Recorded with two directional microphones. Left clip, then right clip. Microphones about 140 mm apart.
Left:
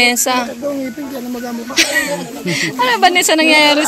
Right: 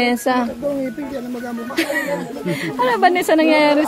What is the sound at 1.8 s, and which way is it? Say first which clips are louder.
A woman's voice: left 6 dB; 20° right (ahead or behind).